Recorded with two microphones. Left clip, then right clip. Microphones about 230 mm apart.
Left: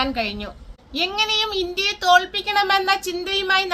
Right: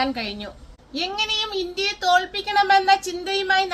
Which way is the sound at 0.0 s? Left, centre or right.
Centre.